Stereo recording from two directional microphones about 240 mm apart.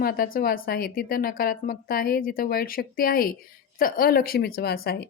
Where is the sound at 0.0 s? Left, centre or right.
Left.